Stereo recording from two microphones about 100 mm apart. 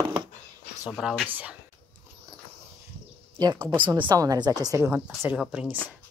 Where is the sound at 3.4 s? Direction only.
40° right (ahead or behind).